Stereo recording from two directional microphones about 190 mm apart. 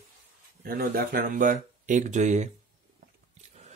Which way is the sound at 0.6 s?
55° right (ahead or behind).